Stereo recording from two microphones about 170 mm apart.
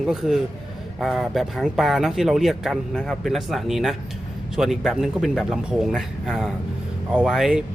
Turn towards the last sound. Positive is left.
turn(degrees=-5)  # may be behind; listen again after turning